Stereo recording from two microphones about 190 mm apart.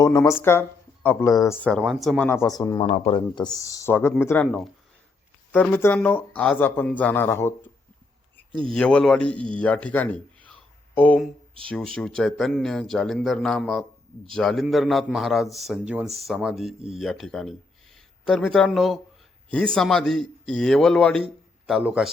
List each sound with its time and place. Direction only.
0.0 s speech: 20° left (ahead or behind)
1.6 s speech: centre (ahead or behind); by 2.8 s 20° left (ahead or behind)
2.8 s speech: 35° left (ahead or behind); by 4.4 s 10° left (ahead or behind)
5.5 s a man's voice: 10° left (ahead or behind)